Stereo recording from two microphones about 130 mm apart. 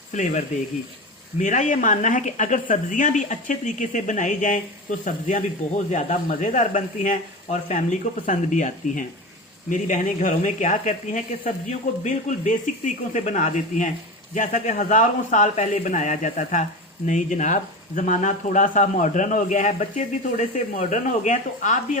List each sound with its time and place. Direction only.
0.1 s speech: 70° left (ahead or behind)